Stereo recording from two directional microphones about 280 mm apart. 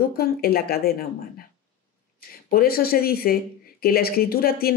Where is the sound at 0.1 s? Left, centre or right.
Left.